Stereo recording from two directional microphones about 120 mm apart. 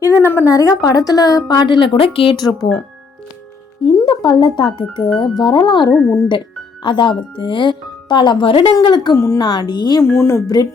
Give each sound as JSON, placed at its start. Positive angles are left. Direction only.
{"t": 0.0, "sound": "a woman's voice", "side_deg": 25}
{"t": 2.3, "sound": "a woman's voice", "side_deg": 35}
{"t": 4.0, "sound": "a woman's voice", "side_deg": 45}
{"t": 5.9, "sound": "speech", "side_deg": 0}
{"t": 6.8, "sound": "a woman's voice", "side_deg": 40}
{"t": 9.1, "sound": "speech", "side_deg": 25}
{"t": 9.4, "sound": "a woman's voice", "side_deg": 35}
{"t": 10.0, "sound": "speech", "side_deg": 25}